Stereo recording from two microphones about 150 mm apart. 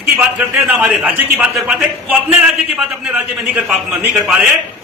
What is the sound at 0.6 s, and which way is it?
A man's voice, 10° right (ahead or behind).